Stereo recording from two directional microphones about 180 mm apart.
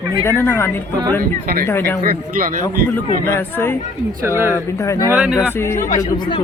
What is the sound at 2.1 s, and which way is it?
Speech, 50° right (ahead or behind).